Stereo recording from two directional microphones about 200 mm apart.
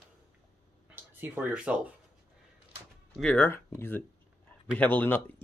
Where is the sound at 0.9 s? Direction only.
10° right (ahead or behind).